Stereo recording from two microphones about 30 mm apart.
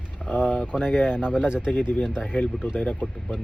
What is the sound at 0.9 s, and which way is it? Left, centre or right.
Speech, left.